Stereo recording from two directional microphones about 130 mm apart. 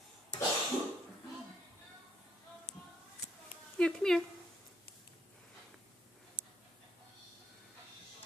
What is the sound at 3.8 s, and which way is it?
Speech, 5° left (ahead or behind).